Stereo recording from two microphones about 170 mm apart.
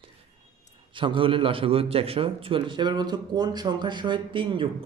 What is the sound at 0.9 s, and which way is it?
A man's voice, 30° right (ahead or behind).